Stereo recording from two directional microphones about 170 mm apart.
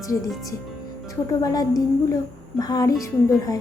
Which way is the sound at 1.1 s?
20° left (ahead or behind).